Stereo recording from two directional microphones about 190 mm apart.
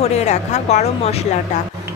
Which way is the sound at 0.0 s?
35° left (ahead or behind).